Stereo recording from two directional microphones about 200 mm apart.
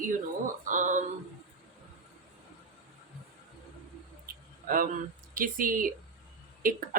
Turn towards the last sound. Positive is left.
turn(degrees=-45)  # may be behind; listen again after turning